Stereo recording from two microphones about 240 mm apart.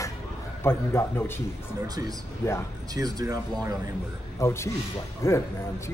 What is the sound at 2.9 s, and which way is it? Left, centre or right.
Speech, centre.